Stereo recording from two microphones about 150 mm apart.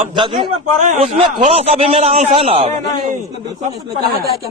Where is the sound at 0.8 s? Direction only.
50° right (ahead or behind).